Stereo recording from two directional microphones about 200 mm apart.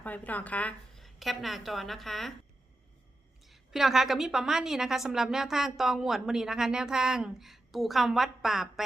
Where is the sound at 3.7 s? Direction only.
Centre (ahead or behind).